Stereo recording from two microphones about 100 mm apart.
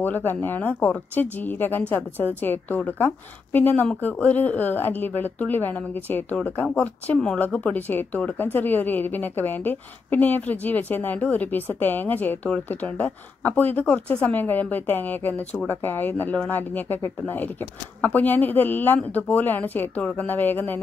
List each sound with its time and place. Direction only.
0.0 s a woman's voice: 20° left (ahead or behind)